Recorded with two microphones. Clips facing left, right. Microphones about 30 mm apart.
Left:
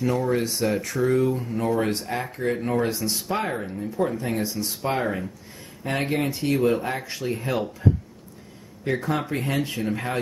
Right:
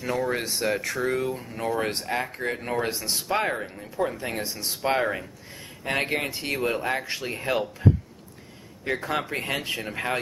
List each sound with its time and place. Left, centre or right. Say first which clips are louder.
0.0 s speech: left 3 dB; centre
4.2 s speech: left 4 dB; right
8.8 s speech: left 2 dB; centre